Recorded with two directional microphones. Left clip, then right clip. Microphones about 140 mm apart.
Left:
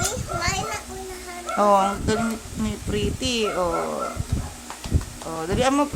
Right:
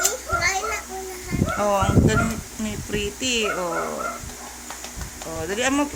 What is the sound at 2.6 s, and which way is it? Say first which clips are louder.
Speech: left 1 dB; 25° left (ahead or behind).